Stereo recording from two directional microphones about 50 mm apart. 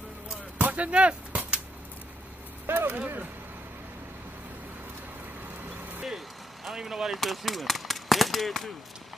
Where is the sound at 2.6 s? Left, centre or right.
Right.